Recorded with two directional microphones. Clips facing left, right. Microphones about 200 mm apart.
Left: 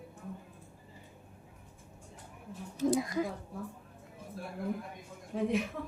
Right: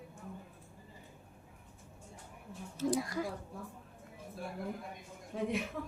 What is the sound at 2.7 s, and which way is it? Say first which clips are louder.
Speech: left 4 dB; 20° left (ahead or behind).